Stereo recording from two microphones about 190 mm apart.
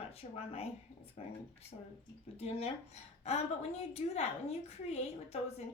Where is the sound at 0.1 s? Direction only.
30° left (ahead or behind).